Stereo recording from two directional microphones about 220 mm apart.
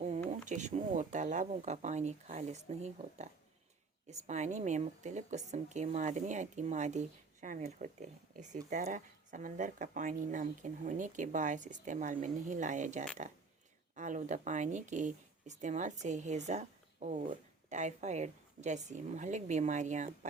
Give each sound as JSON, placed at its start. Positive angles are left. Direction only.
{"t": 0.0, "sound": "speech", "side_deg": -30}
{"t": 4.3, "sound": "speech", "side_deg": -30}